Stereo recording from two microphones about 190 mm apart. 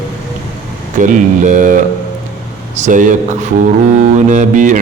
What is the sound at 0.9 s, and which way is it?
Speech, 40° right (ahead or behind).